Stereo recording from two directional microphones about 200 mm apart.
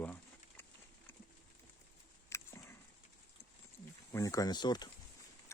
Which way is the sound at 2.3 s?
15° left (ahead or behind).